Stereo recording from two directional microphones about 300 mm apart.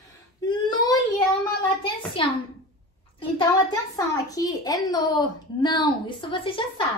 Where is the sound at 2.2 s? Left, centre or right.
Centre.